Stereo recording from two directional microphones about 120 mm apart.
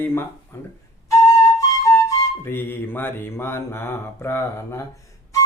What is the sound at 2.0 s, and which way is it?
Music, 20° left (ahead or behind).